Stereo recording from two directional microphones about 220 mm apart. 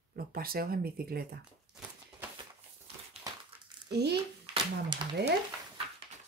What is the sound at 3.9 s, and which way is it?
Speech, 50° right (ahead or behind).